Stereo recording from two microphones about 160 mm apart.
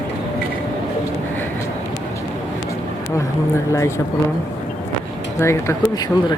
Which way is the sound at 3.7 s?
20° left (ahead or behind).